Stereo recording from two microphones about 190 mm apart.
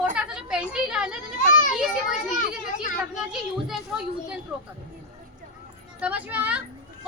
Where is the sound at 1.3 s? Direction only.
45° left (ahead or behind).